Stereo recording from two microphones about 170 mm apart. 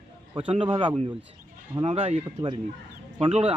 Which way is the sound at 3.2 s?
35° right (ahead or behind).